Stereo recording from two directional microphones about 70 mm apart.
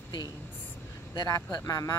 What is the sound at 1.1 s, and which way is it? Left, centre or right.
Speech, left.